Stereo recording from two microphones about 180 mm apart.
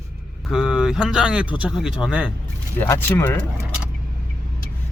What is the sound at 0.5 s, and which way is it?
Speech, 5° right (ahead or behind).